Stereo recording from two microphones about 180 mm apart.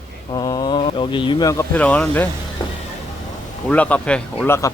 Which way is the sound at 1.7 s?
5° left (ahead or behind).